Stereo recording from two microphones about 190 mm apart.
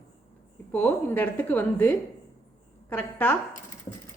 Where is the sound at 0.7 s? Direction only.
10° left (ahead or behind).